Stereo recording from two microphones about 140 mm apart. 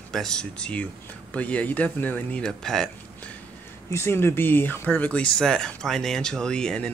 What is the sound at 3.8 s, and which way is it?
Speech, 20° left (ahead or behind).